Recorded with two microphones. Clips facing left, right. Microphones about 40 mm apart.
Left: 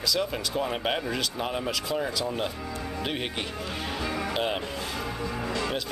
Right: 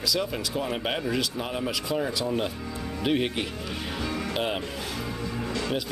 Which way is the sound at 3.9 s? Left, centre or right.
Centre.